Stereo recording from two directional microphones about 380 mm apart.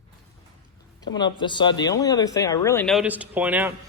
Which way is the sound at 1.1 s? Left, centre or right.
Centre.